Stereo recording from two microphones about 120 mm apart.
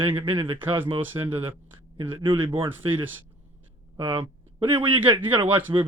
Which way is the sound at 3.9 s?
40° right (ahead or behind).